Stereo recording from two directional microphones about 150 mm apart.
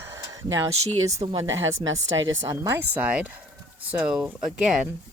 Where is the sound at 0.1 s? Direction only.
20° right (ahead or behind).